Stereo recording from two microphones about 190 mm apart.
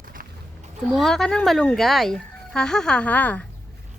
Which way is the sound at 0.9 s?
Centre (ahead or behind).